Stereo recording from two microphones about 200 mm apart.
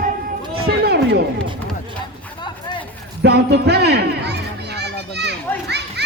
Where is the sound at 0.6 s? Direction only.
50° right (ahead or behind).